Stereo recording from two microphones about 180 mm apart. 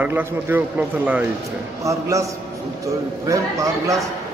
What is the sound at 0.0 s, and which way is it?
A man's voice, 10° right (ahead or behind).